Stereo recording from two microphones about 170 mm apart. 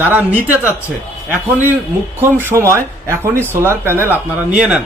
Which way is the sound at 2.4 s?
15° right (ahead or behind).